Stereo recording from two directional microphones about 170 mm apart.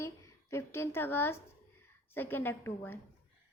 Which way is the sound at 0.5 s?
15° left (ahead or behind).